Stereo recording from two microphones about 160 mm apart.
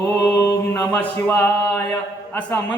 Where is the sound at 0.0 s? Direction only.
15° left (ahead or behind).